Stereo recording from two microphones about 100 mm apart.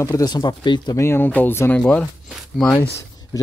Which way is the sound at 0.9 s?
25° left (ahead or behind).